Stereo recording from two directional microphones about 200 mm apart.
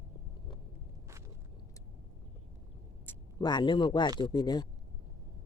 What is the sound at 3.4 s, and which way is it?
Speech, 20° left (ahead or behind).